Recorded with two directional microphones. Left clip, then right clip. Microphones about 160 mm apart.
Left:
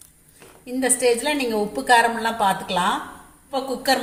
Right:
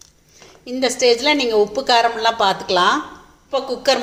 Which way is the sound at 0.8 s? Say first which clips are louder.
Right 5 dB; 45° right (ahead or behind).